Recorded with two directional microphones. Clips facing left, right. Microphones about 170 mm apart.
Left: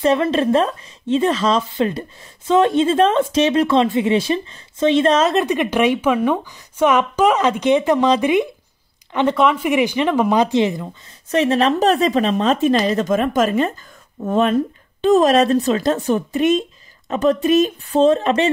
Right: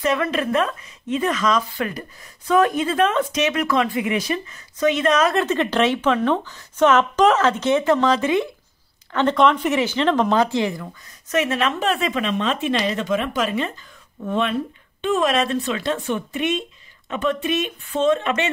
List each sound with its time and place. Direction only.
0.0 s speech: 30° left (ahead or behind)